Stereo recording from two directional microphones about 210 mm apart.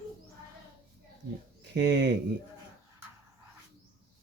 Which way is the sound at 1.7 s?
55° right (ahead or behind).